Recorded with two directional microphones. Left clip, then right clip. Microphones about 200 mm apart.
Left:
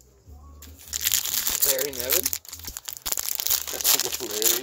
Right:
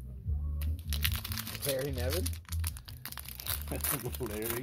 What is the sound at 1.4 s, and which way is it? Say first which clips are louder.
Crumpling: left 8 dB; 55° left (ahead or behind).